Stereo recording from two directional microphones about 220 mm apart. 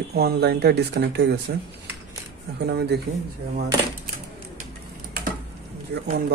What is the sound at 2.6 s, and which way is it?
Speech, 50° right (ahead or behind).